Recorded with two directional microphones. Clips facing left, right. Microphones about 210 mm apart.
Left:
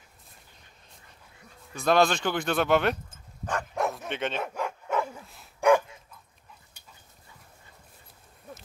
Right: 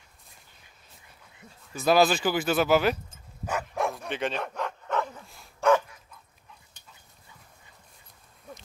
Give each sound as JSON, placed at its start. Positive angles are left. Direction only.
{"t": 1.7, "sound": "speech", "side_deg": -5}
{"t": 3.4, "sound": "dog", "side_deg": -5}